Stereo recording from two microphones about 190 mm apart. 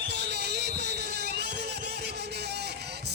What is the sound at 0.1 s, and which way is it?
Music, 60° right (ahead or behind).